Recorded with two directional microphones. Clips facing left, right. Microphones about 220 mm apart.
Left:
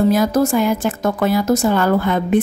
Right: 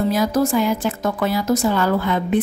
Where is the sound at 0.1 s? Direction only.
50° left (ahead or behind).